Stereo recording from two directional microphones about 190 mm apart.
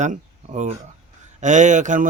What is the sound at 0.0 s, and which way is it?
A man's voice, 40° right (ahead or behind).